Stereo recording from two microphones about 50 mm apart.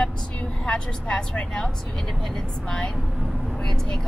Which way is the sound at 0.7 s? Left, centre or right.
Centre.